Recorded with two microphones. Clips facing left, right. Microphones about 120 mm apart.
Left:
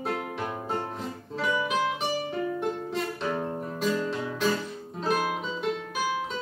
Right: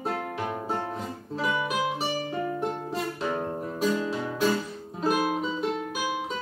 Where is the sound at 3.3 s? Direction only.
25° right (ahead or behind).